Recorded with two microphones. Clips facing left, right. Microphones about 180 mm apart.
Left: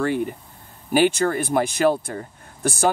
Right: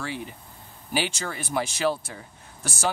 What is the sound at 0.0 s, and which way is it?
Speech, 55° left (ahead or behind).